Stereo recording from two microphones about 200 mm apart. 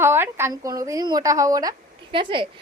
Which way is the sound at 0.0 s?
10° right (ahead or behind).